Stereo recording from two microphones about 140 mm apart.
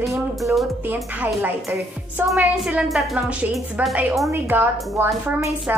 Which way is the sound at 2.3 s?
5° right (ahead or behind).